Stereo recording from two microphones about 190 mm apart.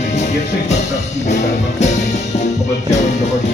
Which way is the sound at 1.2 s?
40° left (ahead or behind).